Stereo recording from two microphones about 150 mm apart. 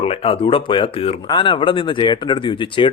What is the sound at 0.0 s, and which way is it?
Speech, 40° left (ahead or behind).